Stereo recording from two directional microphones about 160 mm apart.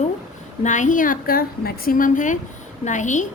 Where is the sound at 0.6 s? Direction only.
50° left (ahead or behind).